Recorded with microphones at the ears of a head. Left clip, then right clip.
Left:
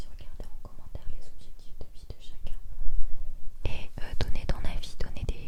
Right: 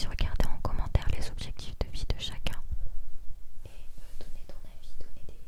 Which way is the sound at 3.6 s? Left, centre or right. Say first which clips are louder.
Left 16 dB; left.